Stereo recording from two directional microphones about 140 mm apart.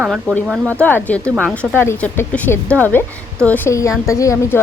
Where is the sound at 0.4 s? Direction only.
5° right (ahead or behind).